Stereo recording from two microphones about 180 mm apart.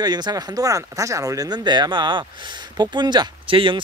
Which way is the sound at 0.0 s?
25° right (ahead or behind).